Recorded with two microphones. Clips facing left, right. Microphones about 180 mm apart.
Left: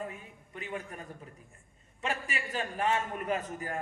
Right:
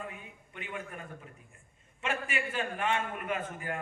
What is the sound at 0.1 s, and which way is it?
A man's voice, 35° left (ahead or behind).